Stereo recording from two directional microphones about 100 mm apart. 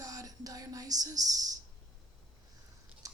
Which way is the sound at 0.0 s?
35° right (ahead or behind).